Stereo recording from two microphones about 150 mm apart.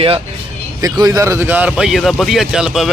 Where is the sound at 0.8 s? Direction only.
25° right (ahead or behind).